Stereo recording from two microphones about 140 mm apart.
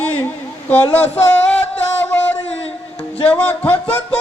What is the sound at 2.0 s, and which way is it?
Music, 15° left (ahead or behind).